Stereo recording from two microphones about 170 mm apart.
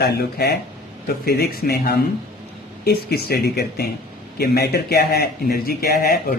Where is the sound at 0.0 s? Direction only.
70° left (ahead or behind).